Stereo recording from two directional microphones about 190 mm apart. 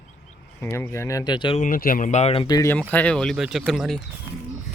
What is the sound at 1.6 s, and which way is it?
Speech, 45° left (ahead or behind).